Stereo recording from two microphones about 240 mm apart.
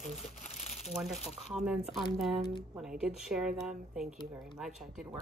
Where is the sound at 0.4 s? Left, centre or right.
Left.